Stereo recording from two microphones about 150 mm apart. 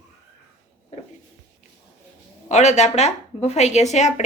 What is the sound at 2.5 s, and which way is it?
Speech, 50° left (ahead or behind).